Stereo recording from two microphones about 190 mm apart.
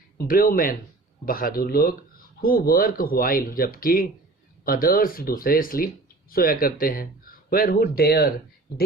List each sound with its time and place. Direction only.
0.2 s speech: 50° left (ahead or behind)